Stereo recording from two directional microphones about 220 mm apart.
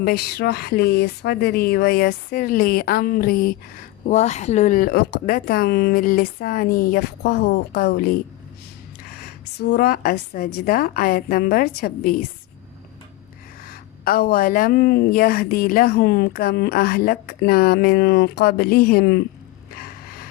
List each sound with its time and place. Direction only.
0.0 s speech: 45° left (ahead or behind)
4.0 s speech: 30° left (ahead or behind)
9.6 s speech: 45° left (ahead or behind)
13.7 s speech: 40° left (ahead or behind)